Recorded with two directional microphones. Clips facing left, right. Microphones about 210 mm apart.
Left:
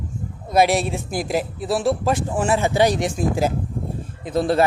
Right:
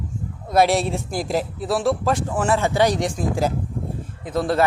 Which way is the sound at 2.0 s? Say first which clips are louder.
Left 1 dB; 25° left (ahead or behind).